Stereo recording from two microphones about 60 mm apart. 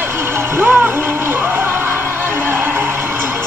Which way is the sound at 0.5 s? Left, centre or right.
Right.